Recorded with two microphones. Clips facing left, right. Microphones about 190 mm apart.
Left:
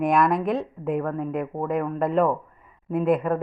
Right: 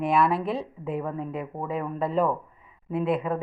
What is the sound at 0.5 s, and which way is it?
Speech, 5° right (ahead or behind).